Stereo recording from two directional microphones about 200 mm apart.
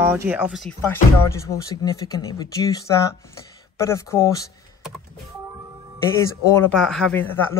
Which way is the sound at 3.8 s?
15° left (ahead or behind).